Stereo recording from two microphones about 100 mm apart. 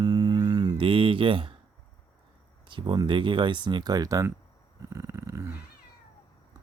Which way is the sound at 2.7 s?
50° right (ahead or behind).